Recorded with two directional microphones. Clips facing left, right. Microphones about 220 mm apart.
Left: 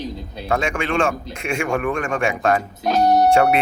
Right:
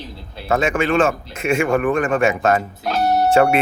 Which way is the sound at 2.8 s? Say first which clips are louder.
Left 2 dB; 15° left (ahead or behind).